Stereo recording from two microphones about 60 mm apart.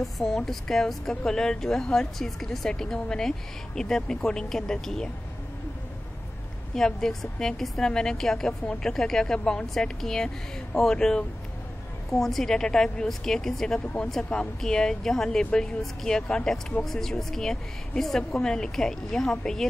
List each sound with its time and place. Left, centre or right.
0.0 s speech: centre
6.7 s speech: centre
13.7 s speech: left
14.6 s speech: centre